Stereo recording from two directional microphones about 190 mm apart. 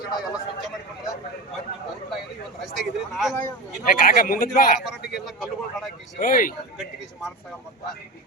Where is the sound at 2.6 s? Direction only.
Centre (ahead or behind).